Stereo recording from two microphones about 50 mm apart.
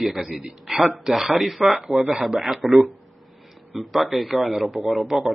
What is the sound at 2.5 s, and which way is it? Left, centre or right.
A man's voice, centre.